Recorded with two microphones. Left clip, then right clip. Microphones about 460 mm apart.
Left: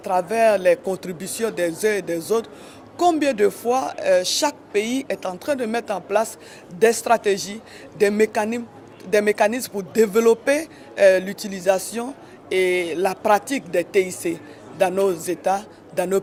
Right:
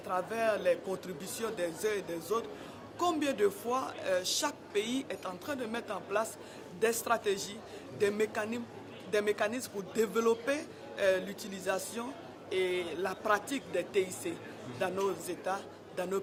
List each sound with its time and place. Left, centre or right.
0.1 s a woman's voice: left